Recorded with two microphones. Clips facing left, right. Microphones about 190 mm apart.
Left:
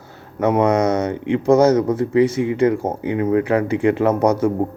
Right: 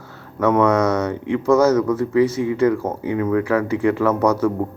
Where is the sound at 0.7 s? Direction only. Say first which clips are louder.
Left 1 dB; 25° left (ahead or behind).